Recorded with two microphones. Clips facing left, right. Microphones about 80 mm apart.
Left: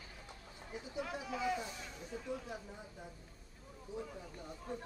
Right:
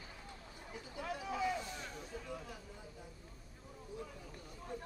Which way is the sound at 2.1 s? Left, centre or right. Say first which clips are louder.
Left 8 dB; left.